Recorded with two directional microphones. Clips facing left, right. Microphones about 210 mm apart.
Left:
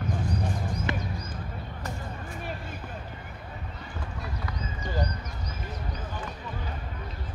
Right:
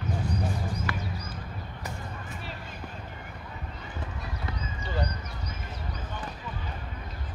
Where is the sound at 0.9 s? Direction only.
20° left (ahead or behind).